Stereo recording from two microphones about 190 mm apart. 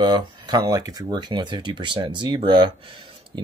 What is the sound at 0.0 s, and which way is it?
Speech, 20° right (ahead or behind).